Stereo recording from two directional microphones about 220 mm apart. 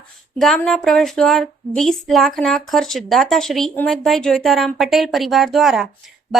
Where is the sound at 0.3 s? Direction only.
Centre (ahead or behind).